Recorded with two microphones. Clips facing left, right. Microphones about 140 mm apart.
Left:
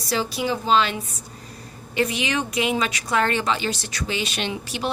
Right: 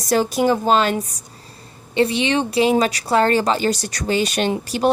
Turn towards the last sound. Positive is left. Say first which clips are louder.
# right 9 dB
turn(degrees=-45)  # may be behind; listen again after turning